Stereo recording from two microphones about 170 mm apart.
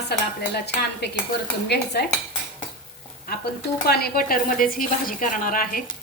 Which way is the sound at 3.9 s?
65° left (ahead or behind).